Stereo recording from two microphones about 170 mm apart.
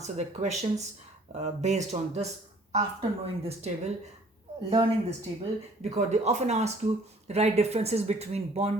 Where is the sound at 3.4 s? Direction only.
40° right (ahead or behind).